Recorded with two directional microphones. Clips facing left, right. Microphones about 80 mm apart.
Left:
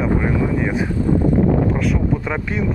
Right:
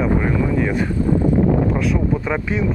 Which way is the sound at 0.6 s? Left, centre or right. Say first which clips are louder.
Even; centre.